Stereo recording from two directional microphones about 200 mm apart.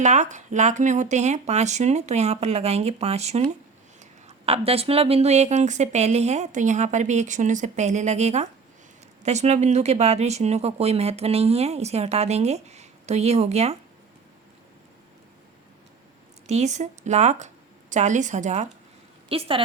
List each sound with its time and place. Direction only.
0.0 s speech: 35° right (ahead or behind)
16.5 s a woman's voice: 35° right (ahead or behind)